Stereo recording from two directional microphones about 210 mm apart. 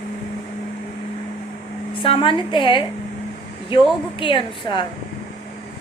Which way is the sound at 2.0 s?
25° left (ahead or behind).